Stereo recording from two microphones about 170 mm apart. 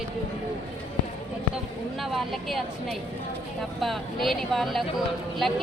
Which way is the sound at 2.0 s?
Centre (ahead or behind).